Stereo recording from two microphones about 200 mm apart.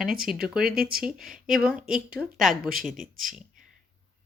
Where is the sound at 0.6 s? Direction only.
50° right (ahead or behind).